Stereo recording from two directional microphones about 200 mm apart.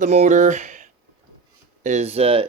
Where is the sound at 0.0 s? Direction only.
35° right (ahead or behind).